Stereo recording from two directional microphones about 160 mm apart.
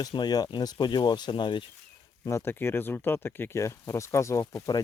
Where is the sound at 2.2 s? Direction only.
15° left (ahead or behind).